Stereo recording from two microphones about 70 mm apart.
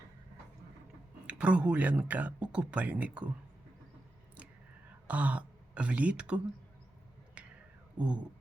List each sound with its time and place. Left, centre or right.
1.3 s speech: centre
5.0 s speech: centre
7.4 s a sound: centre
7.9 s speech: centre